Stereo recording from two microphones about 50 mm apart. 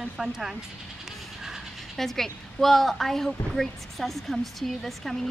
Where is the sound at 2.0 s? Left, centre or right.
Centre.